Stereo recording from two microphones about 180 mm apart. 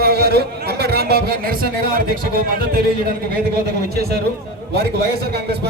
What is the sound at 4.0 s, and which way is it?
Speech, 60° right (ahead or behind).